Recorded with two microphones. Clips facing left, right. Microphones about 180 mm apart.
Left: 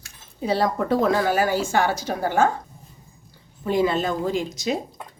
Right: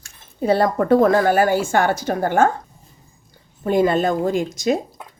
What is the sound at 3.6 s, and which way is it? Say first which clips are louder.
Speech: right 4 dB; 50° right (ahead or behind).